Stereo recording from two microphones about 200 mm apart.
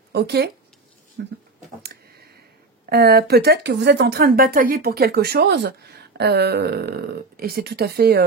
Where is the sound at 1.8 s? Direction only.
50° right (ahead or behind).